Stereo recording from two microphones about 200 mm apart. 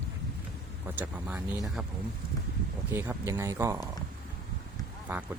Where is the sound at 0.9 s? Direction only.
5° right (ahead or behind).